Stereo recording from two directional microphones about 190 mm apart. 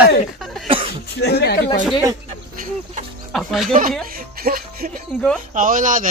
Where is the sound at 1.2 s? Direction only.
60° left (ahead or behind).